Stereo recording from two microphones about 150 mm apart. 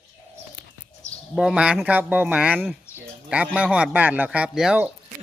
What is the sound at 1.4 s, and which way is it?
Speech, 5° right (ahead or behind).